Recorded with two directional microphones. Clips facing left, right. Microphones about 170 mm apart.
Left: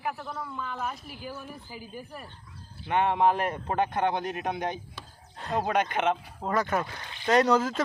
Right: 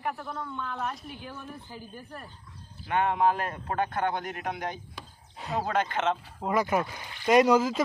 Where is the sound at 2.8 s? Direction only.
25° left (ahead or behind).